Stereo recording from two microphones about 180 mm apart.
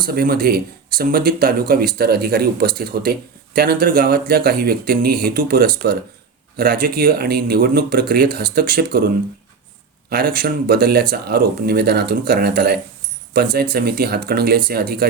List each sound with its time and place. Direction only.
0.0 s speech: 55° right (ahead or behind)
10.1 s speech: 60° right (ahead or behind)